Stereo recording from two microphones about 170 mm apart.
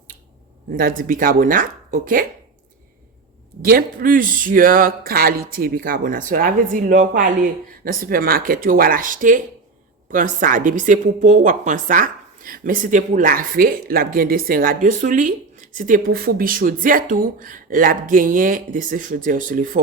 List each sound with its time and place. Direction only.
0.8 s speech: 55° right (ahead or behind)
3.6 s a woman's voice: 60° right (ahead or behind)